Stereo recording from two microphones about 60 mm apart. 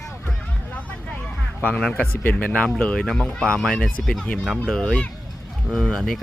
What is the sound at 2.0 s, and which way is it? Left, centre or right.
Speech, left.